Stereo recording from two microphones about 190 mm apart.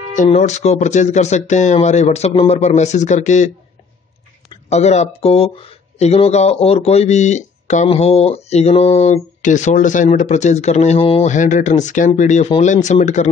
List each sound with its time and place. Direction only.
0.1 s speech: 40° left (ahead or behind)
4.6 s speech: 35° left (ahead or behind)